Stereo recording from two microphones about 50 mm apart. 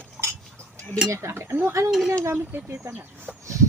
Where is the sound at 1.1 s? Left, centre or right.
Right.